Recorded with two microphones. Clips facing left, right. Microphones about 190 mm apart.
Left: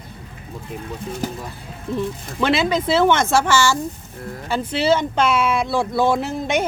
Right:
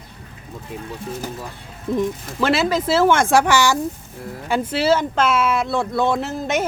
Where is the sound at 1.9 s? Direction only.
15° right (ahead or behind).